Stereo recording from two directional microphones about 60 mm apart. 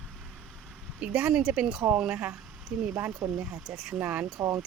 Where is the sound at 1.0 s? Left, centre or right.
Centre.